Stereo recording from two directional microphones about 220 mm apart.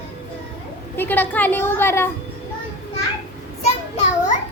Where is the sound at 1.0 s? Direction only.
10° left (ahead or behind).